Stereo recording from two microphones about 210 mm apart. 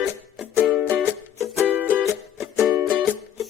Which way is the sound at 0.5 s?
5° right (ahead or behind).